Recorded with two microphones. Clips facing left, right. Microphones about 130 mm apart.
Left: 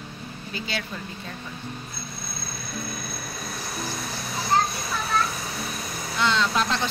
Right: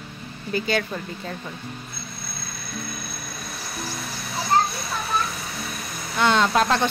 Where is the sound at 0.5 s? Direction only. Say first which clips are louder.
Right 9 dB; 50° right (ahead or behind).